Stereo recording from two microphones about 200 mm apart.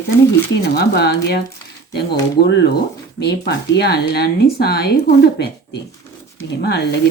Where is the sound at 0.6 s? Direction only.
55° left (ahead or behind).